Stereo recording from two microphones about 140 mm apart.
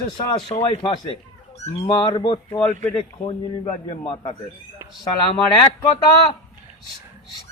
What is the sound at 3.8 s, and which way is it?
Speech, 40° left (ahead or behind).